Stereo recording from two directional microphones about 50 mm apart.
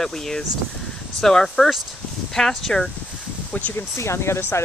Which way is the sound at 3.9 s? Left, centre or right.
Left.